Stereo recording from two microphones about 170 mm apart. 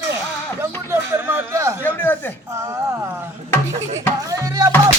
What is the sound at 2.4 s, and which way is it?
Speech, 15° right (ahead or behind).